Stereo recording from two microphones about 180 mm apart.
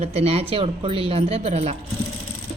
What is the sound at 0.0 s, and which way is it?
Speech, 35° right (ahead or behind).